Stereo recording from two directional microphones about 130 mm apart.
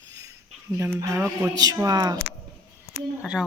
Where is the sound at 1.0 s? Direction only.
20° right (ahead or behind).